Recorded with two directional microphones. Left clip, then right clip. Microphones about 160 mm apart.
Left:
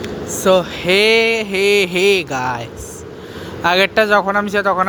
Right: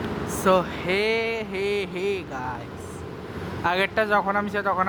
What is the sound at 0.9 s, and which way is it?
Speech, 45° left (ahead or behind).